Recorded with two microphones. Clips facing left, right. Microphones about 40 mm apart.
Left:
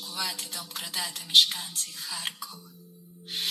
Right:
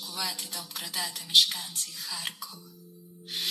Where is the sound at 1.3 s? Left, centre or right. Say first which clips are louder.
Left 2 dB; left.